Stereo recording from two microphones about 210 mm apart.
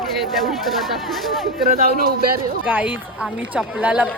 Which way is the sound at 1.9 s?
45° right (ahead or behind).